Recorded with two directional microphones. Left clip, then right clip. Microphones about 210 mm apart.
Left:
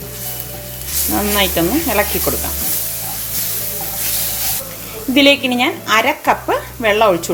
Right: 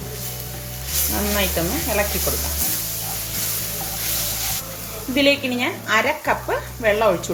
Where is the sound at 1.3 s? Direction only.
45° left (ahead or behind).